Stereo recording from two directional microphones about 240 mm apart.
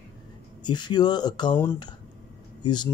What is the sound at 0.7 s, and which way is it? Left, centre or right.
Speech, centre.